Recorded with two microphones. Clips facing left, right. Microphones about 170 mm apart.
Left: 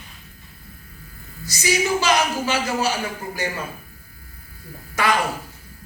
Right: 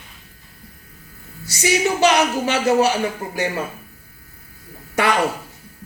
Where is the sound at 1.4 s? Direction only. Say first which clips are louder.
Right 3 dB; 65° right (ahead or behind).